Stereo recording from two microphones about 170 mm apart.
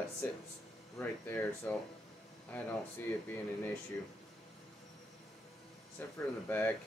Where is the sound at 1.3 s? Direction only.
5° left (ahead or behind).